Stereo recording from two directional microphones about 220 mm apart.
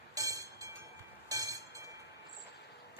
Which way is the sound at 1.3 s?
15° right (ahead or behind).